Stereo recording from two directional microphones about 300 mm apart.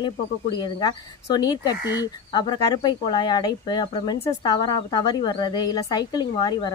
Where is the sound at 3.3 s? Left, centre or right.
Centre.